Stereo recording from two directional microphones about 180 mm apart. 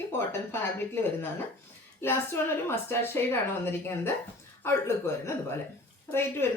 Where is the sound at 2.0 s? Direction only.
15° left (ahead or behind).